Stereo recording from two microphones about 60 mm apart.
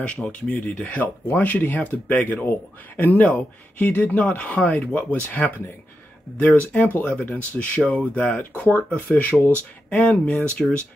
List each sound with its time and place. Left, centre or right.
0.0 s speech: centre